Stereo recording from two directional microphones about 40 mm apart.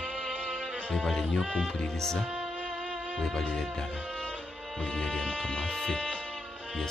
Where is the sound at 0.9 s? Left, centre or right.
Centre.